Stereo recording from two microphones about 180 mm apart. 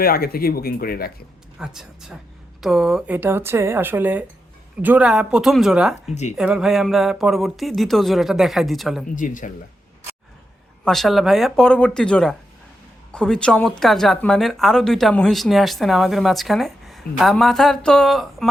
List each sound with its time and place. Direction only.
0.0 s speech: 55° left (ahead or behind)
1.5 s speech: 5° right (ahead or behind)
9.1 s speech: 45° left (ahead or behind)
10.8 s speech: centre (ahead or behind)